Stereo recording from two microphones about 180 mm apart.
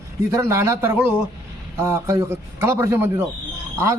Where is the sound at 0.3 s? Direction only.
15° right (ahead or behind).